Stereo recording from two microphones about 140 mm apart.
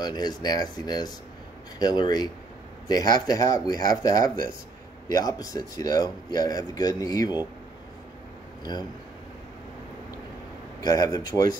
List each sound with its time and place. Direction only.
0.0 s speech: 30° left (ahead or behind)
8.7 s speech: 30° left (ahead or behind)
10.8 s speech: 25° left (ahead or behind)